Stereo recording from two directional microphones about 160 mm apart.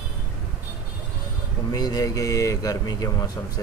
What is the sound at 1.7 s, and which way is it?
A man's voice, 25° left (ahead or behind).